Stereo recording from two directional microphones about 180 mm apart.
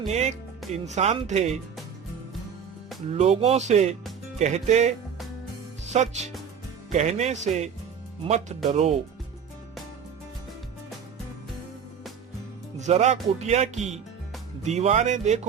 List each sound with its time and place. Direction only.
0.1 s speech: 35° right (ahead or behind)
3.1 s speech: 35° right (ahead or behind)
12.8 s speech: 40° right (ahead or behind)